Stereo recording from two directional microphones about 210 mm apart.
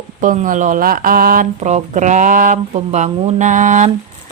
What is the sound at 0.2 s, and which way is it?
Mantra, 35° right (ahead or behind).